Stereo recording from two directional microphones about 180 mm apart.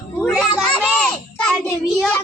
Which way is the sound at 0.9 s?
5° left (ahead or behind).